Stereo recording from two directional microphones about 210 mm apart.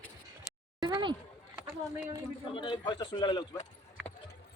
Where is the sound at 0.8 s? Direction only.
20° right (ahead or behind).